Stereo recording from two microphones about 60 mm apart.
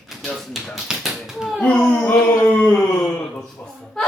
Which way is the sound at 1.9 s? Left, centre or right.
Left.